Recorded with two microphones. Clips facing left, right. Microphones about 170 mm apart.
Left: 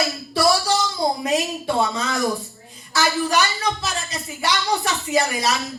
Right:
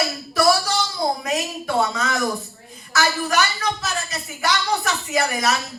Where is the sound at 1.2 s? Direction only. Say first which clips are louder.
Left 3 dB; 30° left (ahead or behind).